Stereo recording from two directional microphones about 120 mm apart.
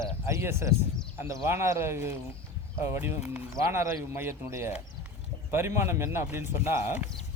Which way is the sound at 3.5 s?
25° right (ahead or behind).